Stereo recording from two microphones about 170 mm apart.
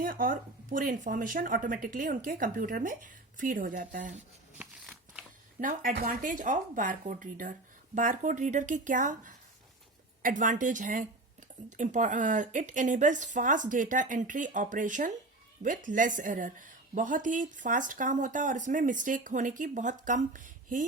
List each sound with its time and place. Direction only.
0.0 s a woman's voice: 55° right (ahead or behind)
4.5 s shuffling cards: 5° right (ahead or behind)
5.5 s a woman's voice: 55° right (ahead or behind)